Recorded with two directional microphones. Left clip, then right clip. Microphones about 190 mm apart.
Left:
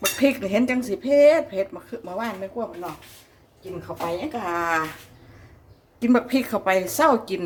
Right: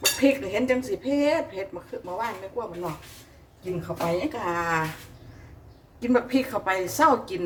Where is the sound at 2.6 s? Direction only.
55° left (ahead or behind).